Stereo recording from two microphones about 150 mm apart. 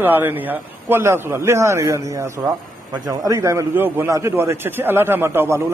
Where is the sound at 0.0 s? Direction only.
15° right (ahead or behind).